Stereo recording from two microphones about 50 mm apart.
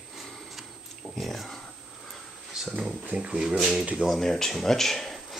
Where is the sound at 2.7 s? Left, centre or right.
Right.